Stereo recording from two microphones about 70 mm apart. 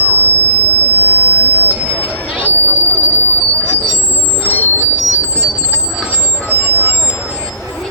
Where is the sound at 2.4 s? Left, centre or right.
Right.